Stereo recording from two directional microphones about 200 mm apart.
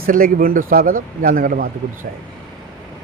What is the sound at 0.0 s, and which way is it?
A man's voice, 45° right (ahead or behind).